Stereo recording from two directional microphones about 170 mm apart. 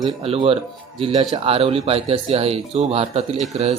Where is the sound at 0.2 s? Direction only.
35° right (ahead or behind).